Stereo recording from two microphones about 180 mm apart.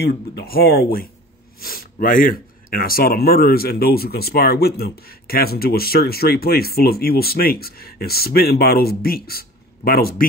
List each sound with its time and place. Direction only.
0.0 s speech: 60° left (ahead or behind)